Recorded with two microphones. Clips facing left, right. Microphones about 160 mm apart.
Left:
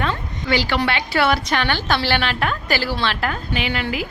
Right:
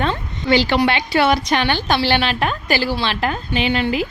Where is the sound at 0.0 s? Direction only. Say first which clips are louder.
Right 3 dB; 25° right (ahead or behind).